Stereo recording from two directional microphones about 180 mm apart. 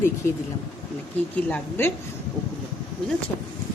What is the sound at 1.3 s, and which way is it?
Speech, 10° left (ahead or behind).